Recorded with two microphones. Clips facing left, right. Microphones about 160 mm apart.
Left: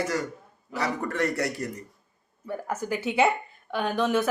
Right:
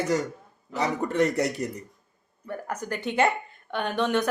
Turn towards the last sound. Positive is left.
turn(degrees=0)  # may be behind; listen again after turning